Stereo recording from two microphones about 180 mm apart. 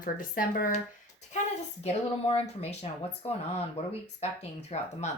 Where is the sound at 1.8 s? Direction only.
35° left (ahead or behind).